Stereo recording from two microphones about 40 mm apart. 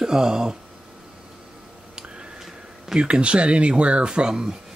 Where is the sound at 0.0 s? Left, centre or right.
Centre.